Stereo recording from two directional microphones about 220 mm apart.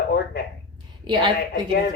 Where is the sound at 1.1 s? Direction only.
20° right (ahead or behind).